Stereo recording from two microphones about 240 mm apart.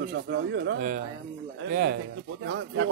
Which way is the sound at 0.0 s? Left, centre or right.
Right.